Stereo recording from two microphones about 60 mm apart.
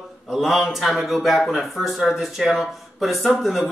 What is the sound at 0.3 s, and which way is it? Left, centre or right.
A man's voice, centre.